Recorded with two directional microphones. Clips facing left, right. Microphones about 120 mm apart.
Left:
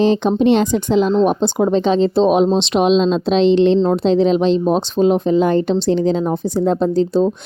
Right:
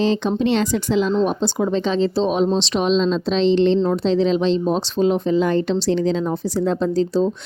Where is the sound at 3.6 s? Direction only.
40° left (ahead or behind).